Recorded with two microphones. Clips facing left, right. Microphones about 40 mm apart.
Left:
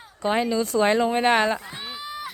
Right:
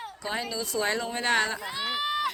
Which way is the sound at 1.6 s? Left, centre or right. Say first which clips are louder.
Right 5 dB; right.